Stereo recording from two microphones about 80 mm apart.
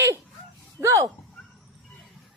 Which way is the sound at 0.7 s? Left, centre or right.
Right.